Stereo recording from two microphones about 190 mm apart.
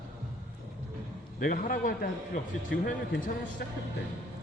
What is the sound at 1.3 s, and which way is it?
Speech, 45° left (ahead or behind).